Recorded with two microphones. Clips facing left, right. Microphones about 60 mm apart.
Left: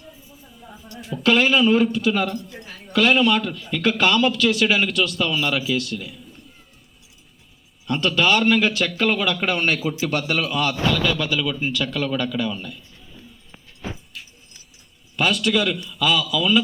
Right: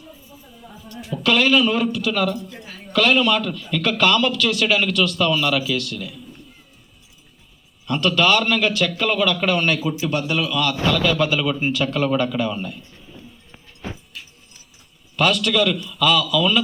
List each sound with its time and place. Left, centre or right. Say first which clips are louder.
1.1 s a man's voice: right 1 dB; left
7.9 s a man's voice: right 1 dB; left
10.0 s a man's voice: right 1 dB; left
10.5 s a man's voice: right 1 dB; left
10.9 s a man's voice: right 2 dB; centre
11.2 s a man's voice: right 3 dB; centre
15.1 s a man's voice: right 1 dB; centre